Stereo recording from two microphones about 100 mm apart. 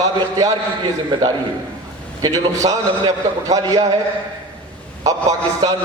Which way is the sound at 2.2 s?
35° right (ahead or behind).